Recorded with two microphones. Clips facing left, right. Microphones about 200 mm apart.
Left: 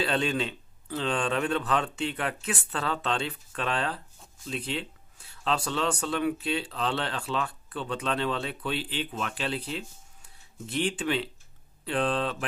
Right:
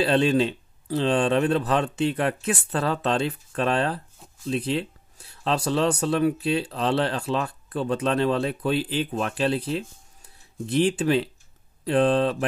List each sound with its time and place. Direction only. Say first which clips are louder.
0.0 s speech: right 7 dB; 35° right (ahead or behind)